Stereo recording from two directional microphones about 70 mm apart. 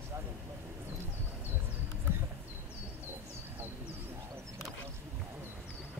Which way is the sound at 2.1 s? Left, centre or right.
Right.